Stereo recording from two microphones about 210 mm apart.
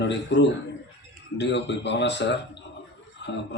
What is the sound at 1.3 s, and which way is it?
Speech, 55° left (ahead or behind).